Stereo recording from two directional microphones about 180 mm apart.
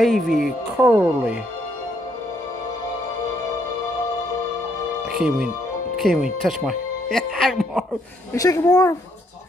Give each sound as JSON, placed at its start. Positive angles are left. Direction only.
{"t": 0.0, "sound": "speech", "side_deg": 0}
{"t": 0.7, "sound": "speech", "side_deg": -10}
{"t": 5.1, "sound": "speech", "side_deg": -5}
{"t": 8.3, "sound": "a woman's voice", "side_deg": 20}